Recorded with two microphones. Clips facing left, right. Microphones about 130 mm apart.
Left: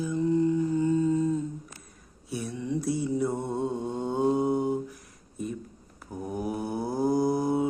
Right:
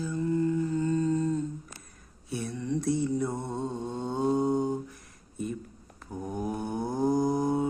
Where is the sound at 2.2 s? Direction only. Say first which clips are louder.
Even; centre (ahead or behind).